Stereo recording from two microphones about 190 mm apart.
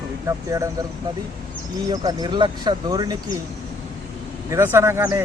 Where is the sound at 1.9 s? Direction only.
20° right (ahead or behind).